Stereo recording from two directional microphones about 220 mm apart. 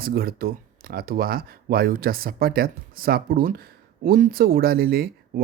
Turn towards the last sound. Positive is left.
turn(degrees=-40)  # may be behind; listen again after turning